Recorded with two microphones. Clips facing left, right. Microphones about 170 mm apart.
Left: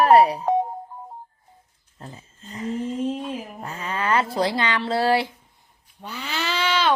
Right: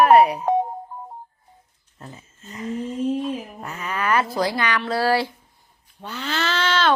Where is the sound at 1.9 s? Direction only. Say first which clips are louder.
Even; 30° left (ahead or behind).